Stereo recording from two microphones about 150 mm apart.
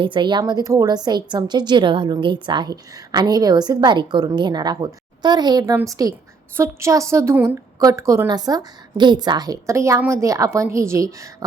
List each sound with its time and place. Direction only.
0.0 s a woman's voice: 30° right (ahead or behind)